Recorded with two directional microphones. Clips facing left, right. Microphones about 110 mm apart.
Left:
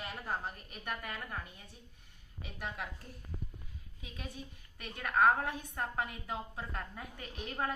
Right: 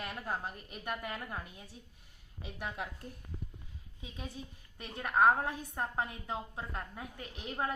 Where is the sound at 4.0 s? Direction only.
25° right (ahead or behind).